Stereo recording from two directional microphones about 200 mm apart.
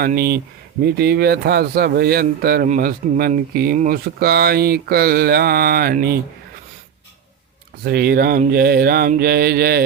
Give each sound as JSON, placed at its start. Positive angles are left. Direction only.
{"t": 0.0, "sound": "mantra", "side_deg": -50}
{"t": 7.9, "sound": "mantra", "side_deg": -50}